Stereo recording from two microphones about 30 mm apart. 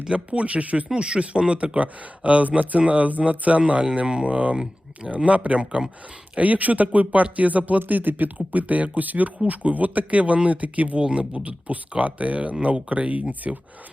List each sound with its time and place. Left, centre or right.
0.3 s speech: right
0.9 s speech: right
5.1 s speech: right
6.4 s speech: right
10.9 s speech: right
11.4 s speech: right
13.5 s speech: right